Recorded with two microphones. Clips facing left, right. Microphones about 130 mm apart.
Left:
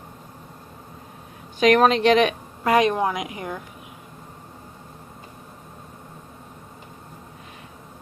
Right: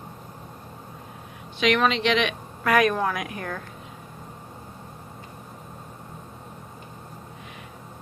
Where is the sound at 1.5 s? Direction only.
45° left (ahead or behind).